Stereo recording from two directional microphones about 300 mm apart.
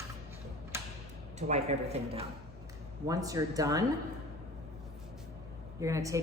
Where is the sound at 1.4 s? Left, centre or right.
Right.